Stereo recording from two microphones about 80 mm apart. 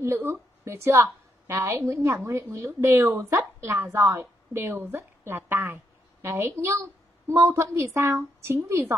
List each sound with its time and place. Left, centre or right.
0.0 s a woman's voice: right